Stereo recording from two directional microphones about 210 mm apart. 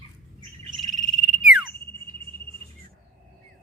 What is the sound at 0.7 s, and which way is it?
Frog, centre (ahead or behind).